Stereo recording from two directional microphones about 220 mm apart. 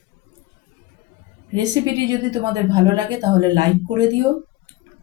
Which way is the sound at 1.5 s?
15° right (ahead or behind).